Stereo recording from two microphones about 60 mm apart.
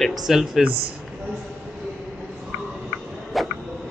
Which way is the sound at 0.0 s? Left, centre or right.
Centre.